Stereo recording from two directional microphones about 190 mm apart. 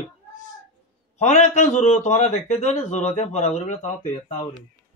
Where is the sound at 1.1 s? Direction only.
40° left (ahead or behind).